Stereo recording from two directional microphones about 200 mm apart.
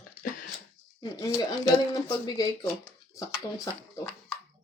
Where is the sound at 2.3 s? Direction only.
20° left (ahead or behind).